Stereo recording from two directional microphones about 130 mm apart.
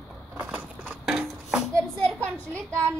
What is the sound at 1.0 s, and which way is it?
Music, 5° right (ahead or behind).